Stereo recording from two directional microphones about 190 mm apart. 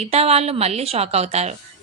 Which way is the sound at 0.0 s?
35° right (ahead or behind).